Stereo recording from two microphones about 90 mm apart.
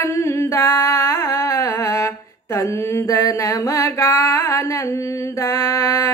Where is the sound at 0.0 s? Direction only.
35° left (ahead or behind).